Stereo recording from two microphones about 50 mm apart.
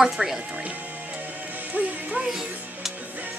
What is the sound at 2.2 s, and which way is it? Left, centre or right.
Music, centre.